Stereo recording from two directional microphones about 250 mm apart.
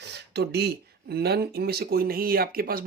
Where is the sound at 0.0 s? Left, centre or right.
Right.